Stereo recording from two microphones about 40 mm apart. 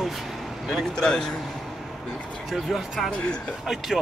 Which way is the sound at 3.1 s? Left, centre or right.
Left.